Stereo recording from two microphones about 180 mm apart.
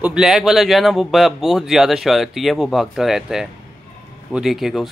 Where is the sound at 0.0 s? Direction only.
5° right (ahead or behind).